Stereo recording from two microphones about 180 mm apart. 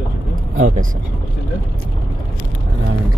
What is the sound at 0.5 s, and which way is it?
Speech, 45° right (ahead or behind).